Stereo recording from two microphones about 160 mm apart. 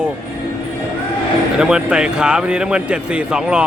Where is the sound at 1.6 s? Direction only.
5° right (ahead or behind).